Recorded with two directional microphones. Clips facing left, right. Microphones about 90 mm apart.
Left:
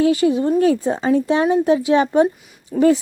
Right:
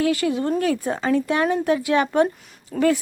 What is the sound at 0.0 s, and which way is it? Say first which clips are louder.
A woman's voice: left 5 dB; 20° left (ahead or behind).